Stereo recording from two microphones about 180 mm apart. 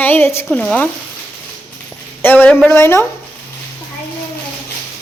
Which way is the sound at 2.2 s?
10° left (ahead or behind).